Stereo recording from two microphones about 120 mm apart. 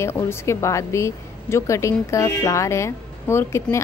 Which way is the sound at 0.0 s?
20° left (ahead or behind).